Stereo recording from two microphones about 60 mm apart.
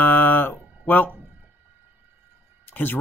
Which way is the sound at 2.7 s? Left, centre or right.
Left.